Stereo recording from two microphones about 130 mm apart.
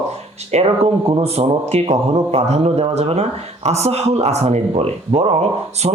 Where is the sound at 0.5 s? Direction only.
50° right (ahead or behind).